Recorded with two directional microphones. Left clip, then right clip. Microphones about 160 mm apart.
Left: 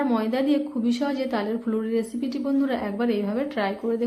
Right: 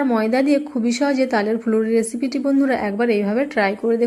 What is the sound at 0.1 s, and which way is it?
A woman's voice, 40° right (ahead or behind).